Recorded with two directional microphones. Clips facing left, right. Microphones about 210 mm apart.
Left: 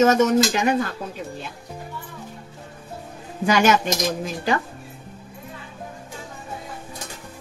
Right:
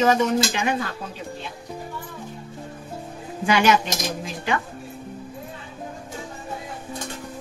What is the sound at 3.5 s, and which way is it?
Speech, 45° left (ahead or behind).